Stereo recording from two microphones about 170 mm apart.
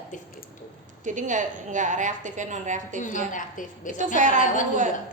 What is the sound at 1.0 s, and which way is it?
A woman's voice, 45° right (ahead or behind).